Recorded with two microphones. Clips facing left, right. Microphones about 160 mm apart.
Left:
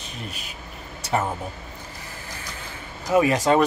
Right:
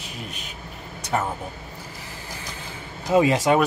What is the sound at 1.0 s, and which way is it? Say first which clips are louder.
Vehicle: left 1 dB; 5° left (ahead or behind).